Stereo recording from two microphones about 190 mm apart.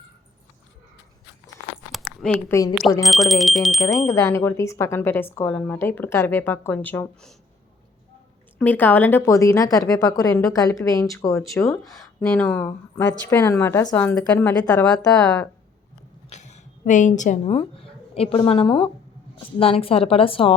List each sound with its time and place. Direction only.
1.9 s zipper: centre (ahead or behind)
2.5 s speech: 15° left (ahead or behind)
3.0 s speech: centre (ahead or behind)
4.1 s speech: 15° left (ahead or behind)
8.5 s speech: 10° left (ahead or behind)
16.3 s a woman's voice: 35° left (ahead or behind)